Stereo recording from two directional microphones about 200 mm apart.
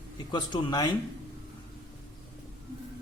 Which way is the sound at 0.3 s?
20° left (ahead or behind).